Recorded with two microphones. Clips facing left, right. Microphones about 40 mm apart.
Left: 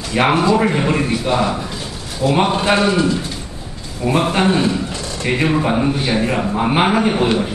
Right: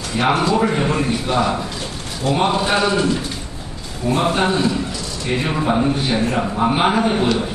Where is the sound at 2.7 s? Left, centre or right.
Left.